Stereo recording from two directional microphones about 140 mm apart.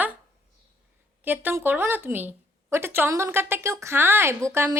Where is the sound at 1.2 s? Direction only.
15° right (ahead or behind).